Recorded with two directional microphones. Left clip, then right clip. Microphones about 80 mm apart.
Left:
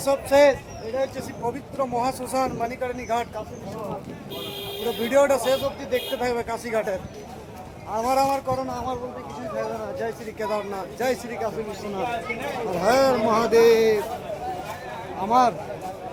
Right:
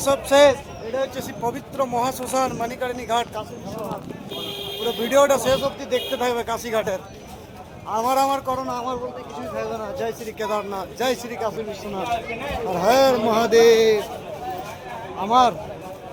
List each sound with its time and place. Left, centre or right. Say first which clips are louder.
0.0 s speech: right 2 dB; centre
5.0 s a man's voice: right 2 dB; centre
11.3 s speech: right 2 dB; centre
12.6 s speech: right 3 dB; centre
15.2 s speech: right 2 dB; centre